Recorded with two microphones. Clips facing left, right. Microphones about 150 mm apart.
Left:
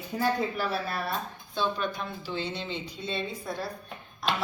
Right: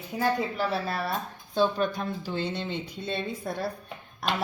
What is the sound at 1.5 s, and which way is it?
Speech, 40° right (ahead or behind).